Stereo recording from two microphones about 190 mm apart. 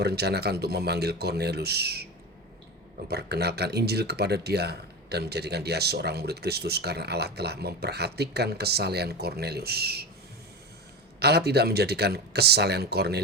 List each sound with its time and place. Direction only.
0.0 s speech: 60° right (ahead or behind)
3.1 s speech: 60° right (ahead or behind)
11.2 s speech: 60° right (ahead or behind)